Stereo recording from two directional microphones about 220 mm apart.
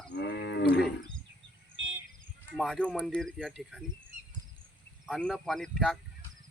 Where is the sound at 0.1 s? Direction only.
50° left (ahead or behind).